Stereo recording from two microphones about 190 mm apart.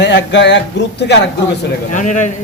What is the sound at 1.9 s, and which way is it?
Speech, 40° left (ahead or behind).